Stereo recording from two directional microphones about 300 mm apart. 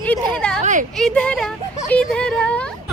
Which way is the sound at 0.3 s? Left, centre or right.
Centre.